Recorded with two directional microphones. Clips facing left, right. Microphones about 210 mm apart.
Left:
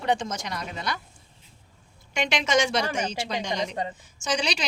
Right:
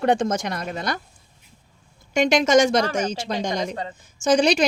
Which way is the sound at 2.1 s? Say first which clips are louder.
Right 8 dB; 40° right (ahead or behind).